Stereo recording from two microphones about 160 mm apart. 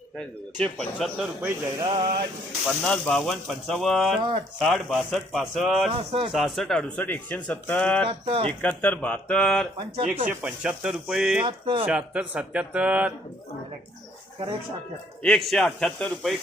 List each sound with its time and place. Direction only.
0.2 s speech: 5° left (ahead or behind)
1.8 s speech: 35° right (ahead or behind)
2.6 s speech: 5° left (ahead or behind)
6.0 s speech: 40° right (ahead or behind)
6.3 s speech: centre (ahead or behind)
8.0 s speech: 35° right (ahead or behind)
8.4 s speech: 10° left (ahead or behind)
9.7 s speech: 35° right (ahead or behind)
10.2 s speech: 5° right (ahead or behind)
11.4 s speech: 35° right (ahead or behind)
11.9 s speech: 5° right (ahead or behind)
15.2 s speech: centre (ahead or behind)